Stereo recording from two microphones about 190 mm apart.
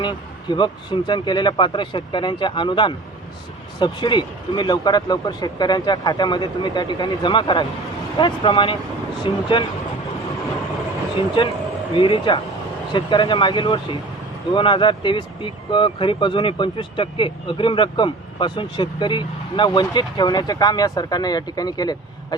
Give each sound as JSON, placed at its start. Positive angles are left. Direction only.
{"t": 0.0, "sound": "speech", "side_deg": 25}
{"t": 11.4, "sound": "speech", "side_deg": 25}